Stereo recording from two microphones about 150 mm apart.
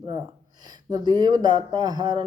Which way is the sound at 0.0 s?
30° right (ahead or behind).